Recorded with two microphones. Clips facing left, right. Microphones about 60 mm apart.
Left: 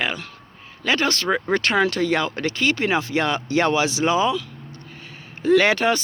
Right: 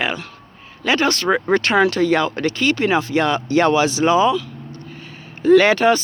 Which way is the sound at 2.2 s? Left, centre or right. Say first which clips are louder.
Right 4 dB; right.